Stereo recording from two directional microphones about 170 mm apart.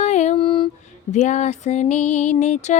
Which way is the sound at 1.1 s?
45° left (ahead or behind).